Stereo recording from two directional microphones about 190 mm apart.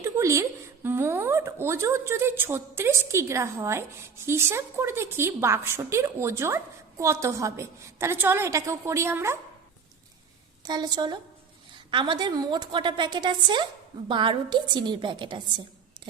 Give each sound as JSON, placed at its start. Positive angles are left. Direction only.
{"t": 0.0, "sound": "a sound", "side_deg": -15}
{"t": 0.9, "sound": "a woman's voice", "side_deg": -15}
{"t": 10.6, "sound": "a woman's voice", "side_deg": -20}